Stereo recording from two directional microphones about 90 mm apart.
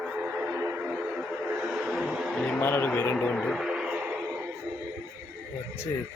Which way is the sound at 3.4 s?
5° right (ahead or behind).